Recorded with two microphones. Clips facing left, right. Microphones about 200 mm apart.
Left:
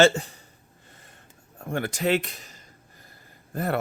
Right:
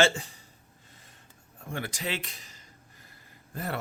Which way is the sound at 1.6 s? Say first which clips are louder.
Left 9 dB; 60° left (ahead or behind).